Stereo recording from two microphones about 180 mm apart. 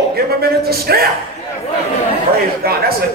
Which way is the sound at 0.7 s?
60° right (ahead or behind).